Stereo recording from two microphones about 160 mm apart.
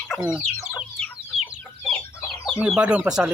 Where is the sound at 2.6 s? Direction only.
5° right (ahead or behind).